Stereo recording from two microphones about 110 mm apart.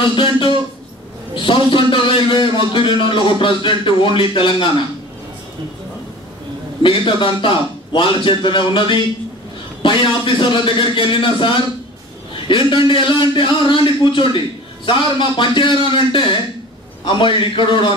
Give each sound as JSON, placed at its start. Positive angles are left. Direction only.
{"t": 0.0, "sound": "a man's voice", "side_deg": 50}
{"t": 1.3, "sound": "a sound", "side_deg": 50}
{"t": 6.8, "sound": "a man's voice", "side_deg": 50}